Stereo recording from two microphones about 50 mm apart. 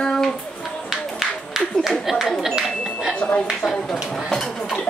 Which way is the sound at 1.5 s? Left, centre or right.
Centre.